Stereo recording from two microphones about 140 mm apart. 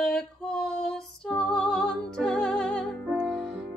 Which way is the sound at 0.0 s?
5° left (ahead or behind).